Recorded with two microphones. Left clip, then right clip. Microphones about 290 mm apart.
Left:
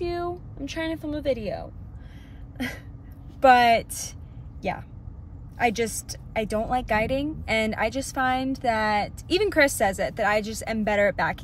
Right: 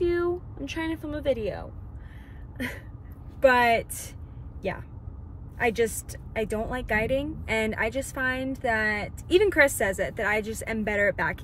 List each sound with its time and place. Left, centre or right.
0.6 s a woman's voice: centre
2.5 s a sound: centre
3.3 s a woman's voice: centre
5.6 s a woman's voice: centre